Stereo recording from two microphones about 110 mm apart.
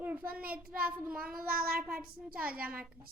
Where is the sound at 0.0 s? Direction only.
15° right (ahead or behind).